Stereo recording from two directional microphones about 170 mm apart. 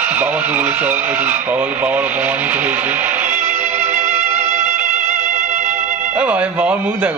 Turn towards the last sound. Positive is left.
turn(degrees=-10)  # may be behind; listen again after turning